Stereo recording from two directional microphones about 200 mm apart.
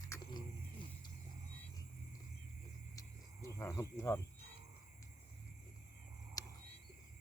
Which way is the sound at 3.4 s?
15° left (ahead or behind).